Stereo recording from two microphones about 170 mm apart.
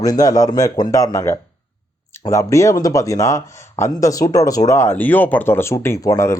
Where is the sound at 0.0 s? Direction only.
20° left (ahead or behind).